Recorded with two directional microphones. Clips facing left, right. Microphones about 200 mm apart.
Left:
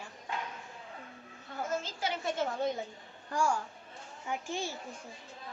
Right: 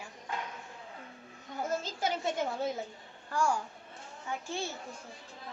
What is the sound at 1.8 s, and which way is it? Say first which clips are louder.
Speech: right 3 dB; 45° right (ahead or behind).